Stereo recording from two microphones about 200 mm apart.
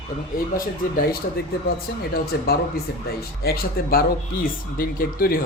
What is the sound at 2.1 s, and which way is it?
Speech, 50° left (ahead or behind).